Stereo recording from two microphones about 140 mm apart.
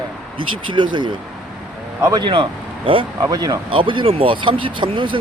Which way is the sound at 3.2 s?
25° right (ahead or behind).